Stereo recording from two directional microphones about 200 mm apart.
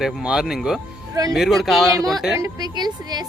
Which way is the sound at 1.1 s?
15° right (ahead or behind).